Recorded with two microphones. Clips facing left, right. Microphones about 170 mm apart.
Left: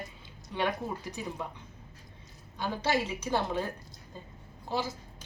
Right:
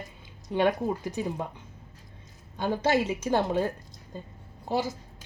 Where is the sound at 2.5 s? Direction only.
50° right (ahead or behind).